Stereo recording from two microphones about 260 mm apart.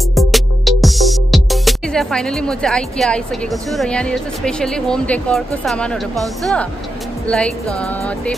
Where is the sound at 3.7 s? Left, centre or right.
Centre.